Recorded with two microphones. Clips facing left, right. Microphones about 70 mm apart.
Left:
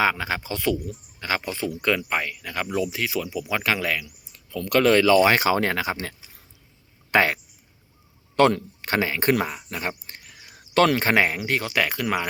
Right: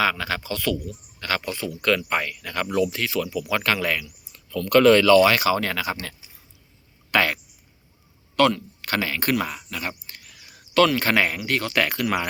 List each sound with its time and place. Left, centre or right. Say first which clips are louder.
0.0 s speech: left 1 dB; left
2.0 s speech: right 1 dB; centre
5.2 s speech: even; left
8.4 s speech: left 1 dB; left
9.4 s a sound: left 1 dB; left
11.1 s speech: left 1 dB; centre
11.8 s speech: right 2 dB; centre